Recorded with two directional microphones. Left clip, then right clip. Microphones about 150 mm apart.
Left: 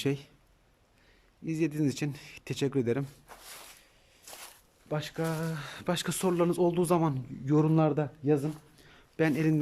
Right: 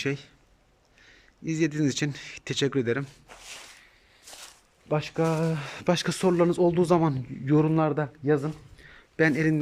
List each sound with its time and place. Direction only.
0.0 s speech: 20° left (ahead or behind)
1.0 s speech: 10° left (ahead or behind)
4.3 s walk: centre (ahead or behind)
4.9 s speech: 5° right (ahead or behind)